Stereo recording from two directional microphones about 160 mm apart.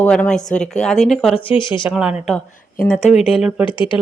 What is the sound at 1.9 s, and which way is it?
Speech, 5° right (ahead or behind).